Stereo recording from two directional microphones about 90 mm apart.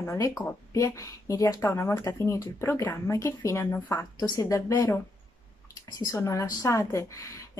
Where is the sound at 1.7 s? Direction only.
30° left (ahead or behind).